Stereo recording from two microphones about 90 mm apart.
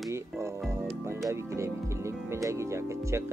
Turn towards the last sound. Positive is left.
turn(degrees=-30)  # may be behind; listen again after turning